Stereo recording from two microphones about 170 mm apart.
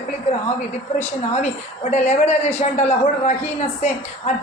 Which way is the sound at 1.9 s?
40° left (ahead or behind).